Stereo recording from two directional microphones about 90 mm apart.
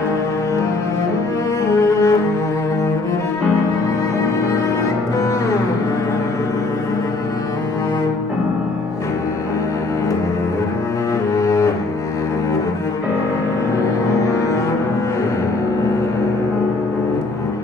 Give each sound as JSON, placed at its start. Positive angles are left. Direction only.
{"t": 1.8, "sound": "cello", "side_deg": 35}
{"t": 11.3, "sound": "cello", "side_deg": 35}